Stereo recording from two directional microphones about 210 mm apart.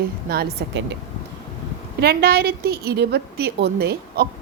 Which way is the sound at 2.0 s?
50° right (ahead or behind).